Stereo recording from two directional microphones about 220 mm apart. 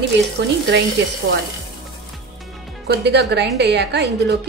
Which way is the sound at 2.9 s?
50° right (ahead or behind).